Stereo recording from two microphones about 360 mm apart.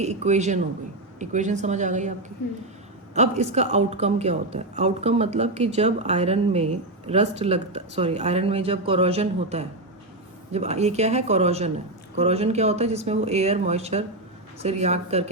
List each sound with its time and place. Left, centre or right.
0.0 s a woman's voice: centre
3.2 s a woman's voice: centre